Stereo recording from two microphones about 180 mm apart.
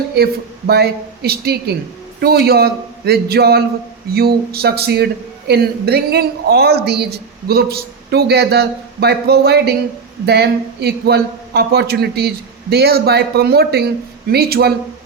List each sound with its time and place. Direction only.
0.7 s a woman's voice: 60° right (ahead or behind)